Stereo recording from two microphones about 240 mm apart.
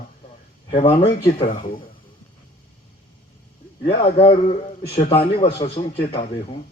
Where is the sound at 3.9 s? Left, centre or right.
Left.